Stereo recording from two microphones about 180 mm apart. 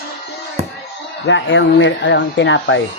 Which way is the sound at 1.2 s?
90° left.